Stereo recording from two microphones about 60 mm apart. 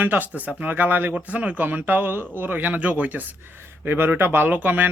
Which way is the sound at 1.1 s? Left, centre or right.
Right.